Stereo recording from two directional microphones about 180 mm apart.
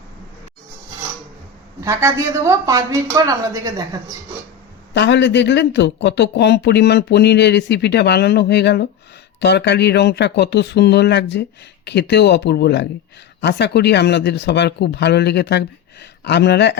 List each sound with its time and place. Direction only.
1.8 s a woman's voice: 15° right (ahead or behind)
4.9 s speech: 75° left (ahead or behind)